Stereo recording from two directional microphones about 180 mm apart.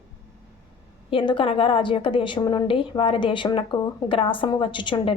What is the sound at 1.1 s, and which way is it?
Speech, 30° left (ahead or behind).